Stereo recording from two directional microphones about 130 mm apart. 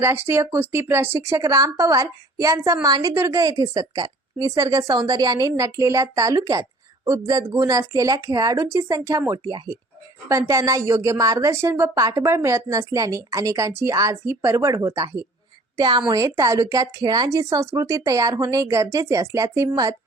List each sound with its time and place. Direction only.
0.0 s a woman's voice: 20° right (ahead or behind)